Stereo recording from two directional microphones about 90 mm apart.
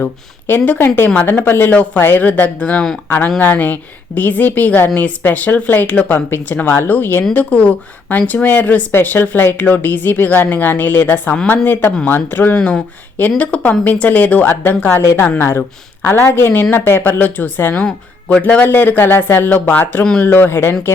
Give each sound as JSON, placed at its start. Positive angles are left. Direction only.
{"t": 0.0, "sound": "a woman's voice", "side_deg": 20}
{"t": 17.8, "sound": "speech", "side_deg": 5}
{"t": 18.4, "sound": "a woman's voice", "side_deg": 20}